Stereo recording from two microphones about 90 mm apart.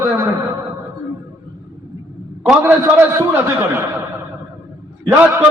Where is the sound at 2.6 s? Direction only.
25° right (ahead or behind).